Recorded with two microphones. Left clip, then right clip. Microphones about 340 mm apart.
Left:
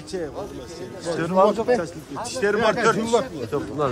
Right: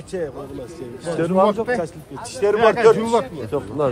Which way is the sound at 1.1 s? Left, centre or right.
Centre.